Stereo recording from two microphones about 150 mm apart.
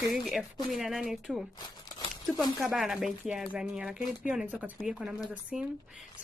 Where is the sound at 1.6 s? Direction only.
25° left (ahead or behind).